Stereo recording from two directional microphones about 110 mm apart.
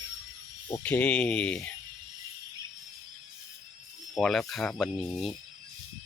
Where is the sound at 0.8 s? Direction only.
15° left (ahead or behind).